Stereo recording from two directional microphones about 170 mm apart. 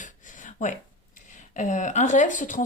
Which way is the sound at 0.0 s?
45° left (ahead or behind).